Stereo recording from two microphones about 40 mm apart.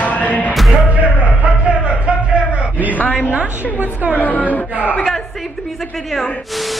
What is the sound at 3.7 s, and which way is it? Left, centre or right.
Speech, right.